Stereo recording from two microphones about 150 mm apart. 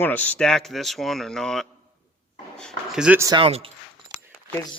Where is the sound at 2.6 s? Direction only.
Centre (ahead or behind).